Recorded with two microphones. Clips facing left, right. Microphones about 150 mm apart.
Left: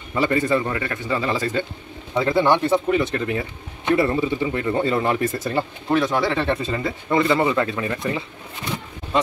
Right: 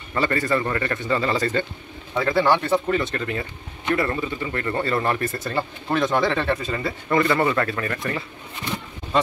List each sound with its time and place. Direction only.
0.1 s speech: 15° left (ahead or behind)
2.1 s speech: 20° left (ahead or behind)